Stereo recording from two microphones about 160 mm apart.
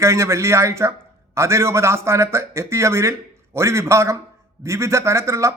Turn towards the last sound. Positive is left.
turn(degrees=-20)  # may be behind; listen again after turning